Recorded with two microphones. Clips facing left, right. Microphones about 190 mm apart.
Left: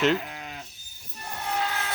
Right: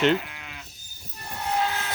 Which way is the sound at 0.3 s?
40° left (ahead or behind).